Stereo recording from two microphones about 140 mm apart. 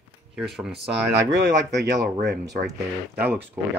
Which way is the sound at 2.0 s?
90° right.